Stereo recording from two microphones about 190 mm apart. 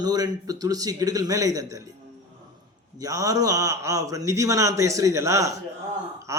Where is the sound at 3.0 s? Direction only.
20° right (ahead or behind).